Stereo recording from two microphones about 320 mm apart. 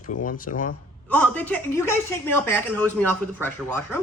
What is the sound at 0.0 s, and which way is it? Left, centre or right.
Speech, left.